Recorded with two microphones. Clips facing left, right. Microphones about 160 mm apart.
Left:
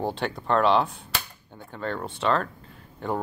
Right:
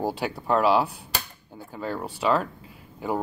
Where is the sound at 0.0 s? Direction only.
10° right (ahead or behind).